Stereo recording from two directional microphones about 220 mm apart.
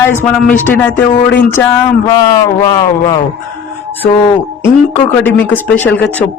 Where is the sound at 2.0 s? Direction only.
15° left (ahead or behind).